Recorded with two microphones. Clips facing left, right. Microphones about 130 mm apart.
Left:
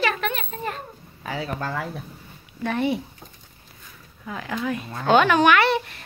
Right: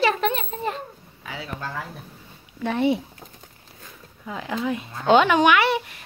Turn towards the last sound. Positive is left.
turn(degrees=-10)  # may be behind; listen again after turning